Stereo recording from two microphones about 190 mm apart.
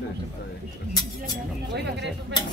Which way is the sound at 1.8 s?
65° right (ahead or behind).